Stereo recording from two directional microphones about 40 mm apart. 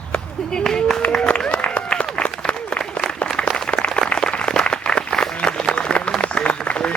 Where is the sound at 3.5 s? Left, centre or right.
Left.